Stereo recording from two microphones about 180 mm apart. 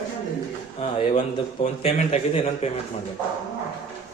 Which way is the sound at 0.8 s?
35° left (ahead or behind).